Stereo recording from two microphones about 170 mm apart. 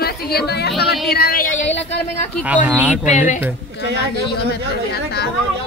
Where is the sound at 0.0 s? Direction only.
65° left (ahead or behind).